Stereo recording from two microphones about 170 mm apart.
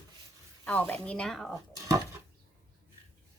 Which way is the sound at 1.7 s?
20° right (ahead or behind).